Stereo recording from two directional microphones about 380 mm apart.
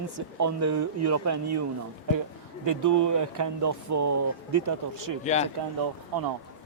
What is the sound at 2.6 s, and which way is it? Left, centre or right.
Speech, right.